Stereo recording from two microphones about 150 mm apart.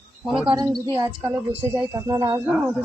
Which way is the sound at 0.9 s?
15° right (ahead or behind).